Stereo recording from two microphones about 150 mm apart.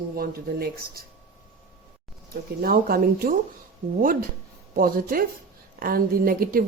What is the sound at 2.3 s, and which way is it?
A woman's voice, 80° right.